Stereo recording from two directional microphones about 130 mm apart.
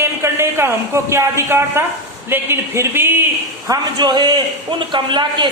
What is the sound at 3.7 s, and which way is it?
A man's voice, 35° right (ahead or behind).